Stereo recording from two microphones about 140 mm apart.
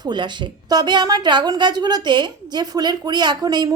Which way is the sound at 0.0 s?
30° right (ahead or behind).